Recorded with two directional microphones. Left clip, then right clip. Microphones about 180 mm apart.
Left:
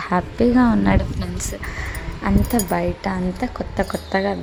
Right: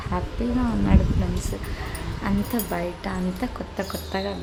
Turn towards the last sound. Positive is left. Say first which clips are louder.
# left 7 dB
turn(degrees=25)  # may be behind; listen again after turning